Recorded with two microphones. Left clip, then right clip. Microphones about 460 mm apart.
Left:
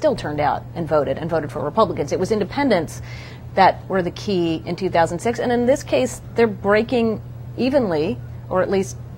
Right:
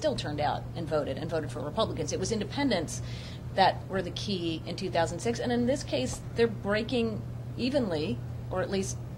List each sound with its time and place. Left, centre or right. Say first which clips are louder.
0.0 s a woman's voice: left 10 dB; left